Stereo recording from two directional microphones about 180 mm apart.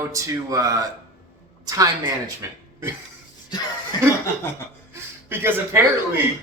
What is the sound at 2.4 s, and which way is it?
Speech, 15° right (ahead or behind).